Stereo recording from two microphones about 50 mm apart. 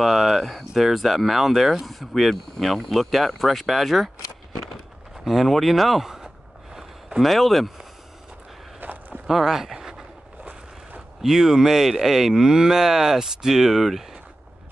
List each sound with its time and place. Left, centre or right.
0.0 s speech: centre
5.1 s a sound: centre
7.2 s speech: centre
8.8 s a sound: right
9.3 s speech: centre
11.2 s speech: centre